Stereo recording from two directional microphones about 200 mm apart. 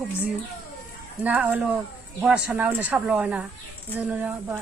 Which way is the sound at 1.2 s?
5° right (ahead or behind).